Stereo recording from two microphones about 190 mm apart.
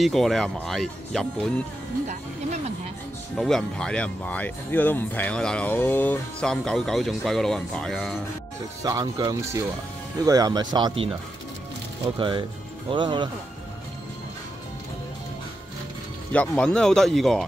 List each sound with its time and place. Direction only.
0.0 s speech: centre (ahead or behind)
3.3 s speech: centre (ahead or behind)
8.8 s speech: 20° right (ahead or behind)
12.2 s speech: 25° right (ahead or behind)
16.3 s speech: 5° left (ahead or behind)